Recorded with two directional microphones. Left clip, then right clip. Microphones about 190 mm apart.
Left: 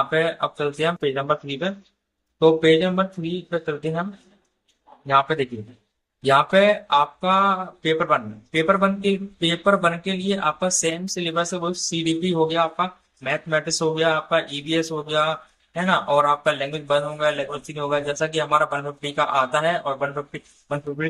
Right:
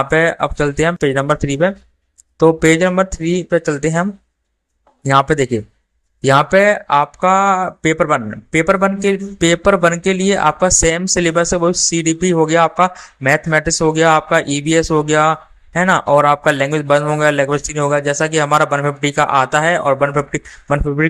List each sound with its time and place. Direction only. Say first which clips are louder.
0.0 s speech: right 7 dB; 40° right (ahead or behind)
5.0 s speech: right 6 dB; 40° right (ahead or behind)